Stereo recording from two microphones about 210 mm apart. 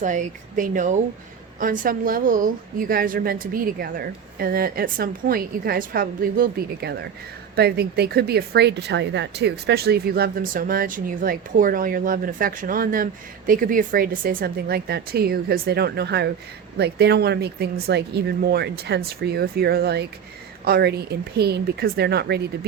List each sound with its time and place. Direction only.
0.0 s a woman's voice: 35° right (ahead or behind)